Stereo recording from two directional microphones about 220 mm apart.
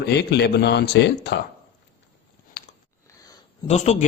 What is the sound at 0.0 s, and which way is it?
Speech, 50° left (ahead or behind).